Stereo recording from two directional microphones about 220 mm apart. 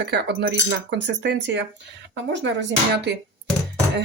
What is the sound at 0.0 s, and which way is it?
Speech, 50° right (ahead or behind).